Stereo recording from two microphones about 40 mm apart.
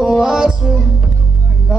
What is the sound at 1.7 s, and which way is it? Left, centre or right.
Vehicle, centre.